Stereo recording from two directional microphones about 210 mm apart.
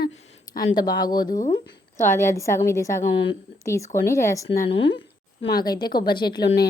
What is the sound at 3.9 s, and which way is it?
Speech, 40° left (ahead or behind).